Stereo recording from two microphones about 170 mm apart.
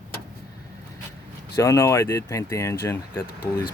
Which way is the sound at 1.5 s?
20° left (ahead or behind).